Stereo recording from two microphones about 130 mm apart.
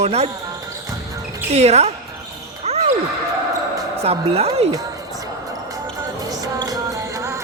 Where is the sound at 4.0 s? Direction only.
55° right (ahead or behind).